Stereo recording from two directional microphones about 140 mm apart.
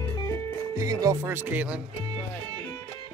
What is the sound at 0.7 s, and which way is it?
Speech, 25° right (ahead or behind).